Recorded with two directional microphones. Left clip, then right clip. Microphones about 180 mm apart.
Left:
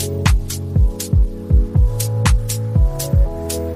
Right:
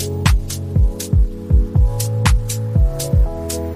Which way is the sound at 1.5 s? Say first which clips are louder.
Even; centre (ahead or behind).